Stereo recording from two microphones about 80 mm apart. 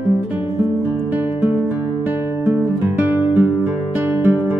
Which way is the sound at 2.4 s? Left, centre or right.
Right.